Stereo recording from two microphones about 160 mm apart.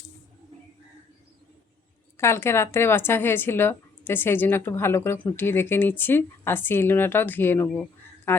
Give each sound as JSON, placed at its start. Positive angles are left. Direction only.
{"t": 2.1, "sound": "a woman's voice", "side_deg": 15}